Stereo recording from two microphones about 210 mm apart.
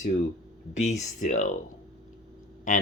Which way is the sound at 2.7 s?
35° left (ahead or behind).